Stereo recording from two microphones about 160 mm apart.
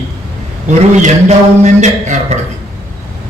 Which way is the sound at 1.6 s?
45° right (ahead or behind).